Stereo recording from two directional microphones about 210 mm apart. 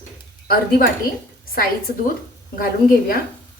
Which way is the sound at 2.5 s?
45° left (ahead or behind).